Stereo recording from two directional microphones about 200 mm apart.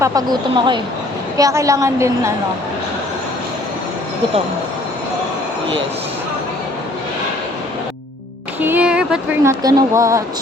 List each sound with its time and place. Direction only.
0.0 s a woman's voice: 20° right (ahead or behind)
8.6 s speech: 10° right (ahead or behind)